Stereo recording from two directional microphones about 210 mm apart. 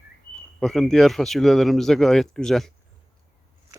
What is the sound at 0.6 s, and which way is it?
Speech, centre (ahead or behind).